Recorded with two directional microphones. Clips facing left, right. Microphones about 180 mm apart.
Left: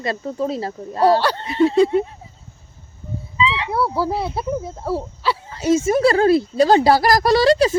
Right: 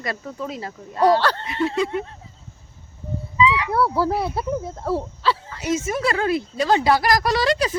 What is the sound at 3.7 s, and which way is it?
Speech, 5° left (ahead or behind).